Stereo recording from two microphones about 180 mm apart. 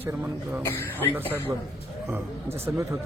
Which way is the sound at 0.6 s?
15° left (ahead or behind).